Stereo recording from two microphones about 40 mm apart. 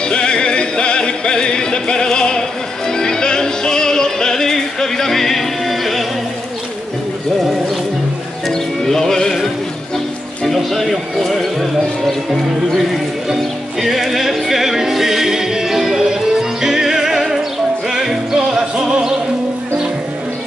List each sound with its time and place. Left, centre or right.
0.1 s music: left; by 6.0 s centre
8.5 s music: centre
10.4 s a sound: centre
13.3 s music: centre
18.9 s music: right